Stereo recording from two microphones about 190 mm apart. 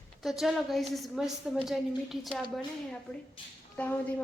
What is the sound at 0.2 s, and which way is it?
Speech, centre (ahead or behind).